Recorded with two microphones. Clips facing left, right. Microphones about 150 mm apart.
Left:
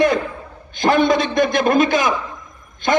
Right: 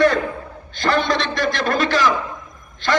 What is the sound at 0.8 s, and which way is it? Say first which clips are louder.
A man's voice: left 4 dB; 50° left (ahead or behind).